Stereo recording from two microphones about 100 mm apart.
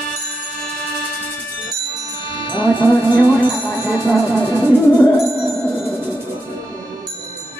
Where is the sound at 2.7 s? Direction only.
20° right (ahead or behind).